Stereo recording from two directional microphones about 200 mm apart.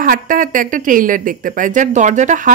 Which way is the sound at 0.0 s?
45° right (ahead or behind).